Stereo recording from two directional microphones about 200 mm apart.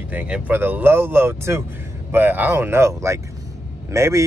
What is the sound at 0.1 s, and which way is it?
Speech, 10° right (ahead or behind).